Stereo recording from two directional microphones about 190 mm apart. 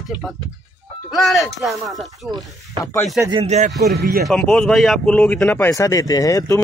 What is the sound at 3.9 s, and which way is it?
Speech, 50° right (ahead or behind).